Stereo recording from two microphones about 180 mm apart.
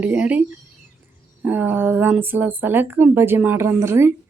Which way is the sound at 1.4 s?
10° right (ahead or behind).